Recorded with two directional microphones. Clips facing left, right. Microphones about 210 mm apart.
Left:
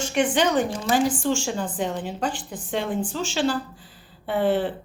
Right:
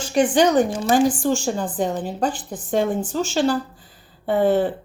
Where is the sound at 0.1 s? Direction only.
35° right (ahead or behind).